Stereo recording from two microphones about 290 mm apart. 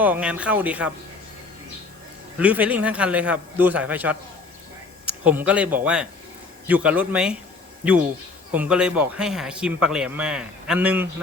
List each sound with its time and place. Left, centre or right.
0.0 s speech: centre
2.4 s speech: centre
8.5 s speech: centre